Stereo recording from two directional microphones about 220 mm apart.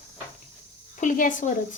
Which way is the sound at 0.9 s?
35° left (ahead or behind).